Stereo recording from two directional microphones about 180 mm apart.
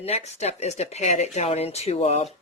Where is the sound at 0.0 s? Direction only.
35° left (ahead or behind).